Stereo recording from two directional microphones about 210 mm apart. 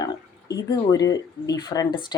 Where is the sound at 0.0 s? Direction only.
20° left (ahead or behind).